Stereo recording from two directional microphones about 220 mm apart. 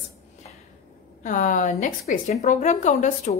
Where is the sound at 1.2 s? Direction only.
35° left (ahead or behind).